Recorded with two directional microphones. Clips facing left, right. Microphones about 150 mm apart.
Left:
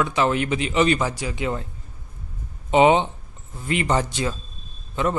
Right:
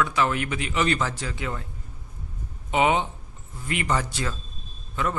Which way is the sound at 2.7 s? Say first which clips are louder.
Left 6 dB; 25° left (ahead or behind).